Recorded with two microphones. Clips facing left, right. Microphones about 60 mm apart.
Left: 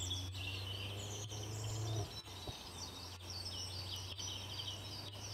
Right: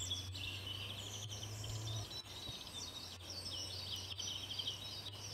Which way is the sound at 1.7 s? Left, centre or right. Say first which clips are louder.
Left 6 dB; left.